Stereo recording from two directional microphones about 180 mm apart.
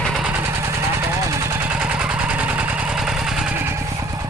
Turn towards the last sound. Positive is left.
turn(degrees=-5)  # may be behind; listen again after turning